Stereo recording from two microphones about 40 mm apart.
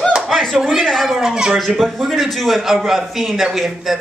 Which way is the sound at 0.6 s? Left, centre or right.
Centre.